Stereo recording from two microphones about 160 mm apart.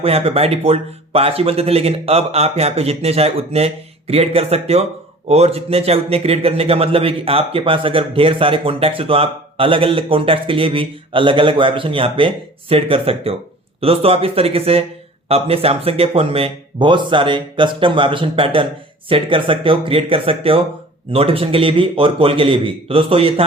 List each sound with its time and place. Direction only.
0.0 s a man's voice: 40° right (ahead or behind)